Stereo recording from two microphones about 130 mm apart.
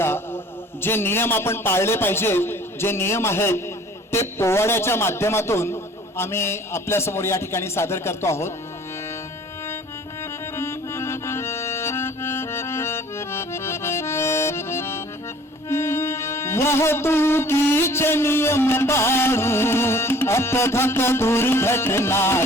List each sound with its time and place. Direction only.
0.8 s a man's voice: 15° left (ahead or behind)
10.6 s accordion: 20° left (ahead or behind)
15.7 s music: 20° left (ahead or behind)